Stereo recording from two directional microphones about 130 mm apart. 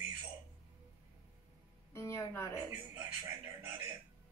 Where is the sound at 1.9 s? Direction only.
25° left (ahead or behind).